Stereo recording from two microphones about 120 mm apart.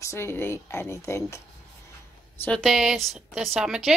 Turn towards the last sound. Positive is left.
turn(degrees=-5)  # may be behind; listen again after turning